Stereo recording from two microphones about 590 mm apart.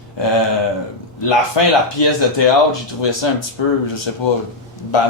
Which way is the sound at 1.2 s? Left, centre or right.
Left.